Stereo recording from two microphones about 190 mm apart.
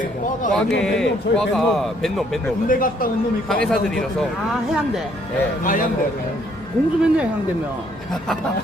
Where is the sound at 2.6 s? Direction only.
45° left (ahead or behind).